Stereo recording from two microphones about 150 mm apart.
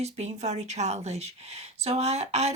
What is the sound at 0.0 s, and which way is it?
Speech, 50° right (ahead or behind).